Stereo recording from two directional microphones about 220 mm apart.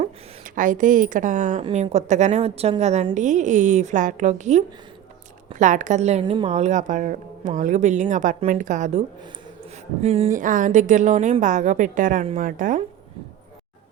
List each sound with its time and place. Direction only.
0.0 s a woman's voice: 35° right (ahead or behind)